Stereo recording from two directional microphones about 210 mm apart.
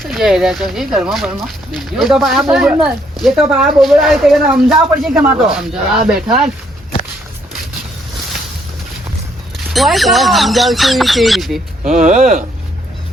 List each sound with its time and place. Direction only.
0.0 s speech: centre (ahead or behind)
9.6 s speech: centre (ahead or behind)
11.8 s speech: 40° right (ahead or behind)